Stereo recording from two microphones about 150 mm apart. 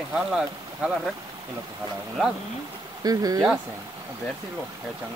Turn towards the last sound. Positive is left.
turn(degrees=-25)  # may be behind; listen again after turning